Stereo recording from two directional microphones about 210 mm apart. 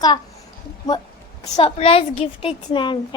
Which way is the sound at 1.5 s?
25° left (ahead or behind).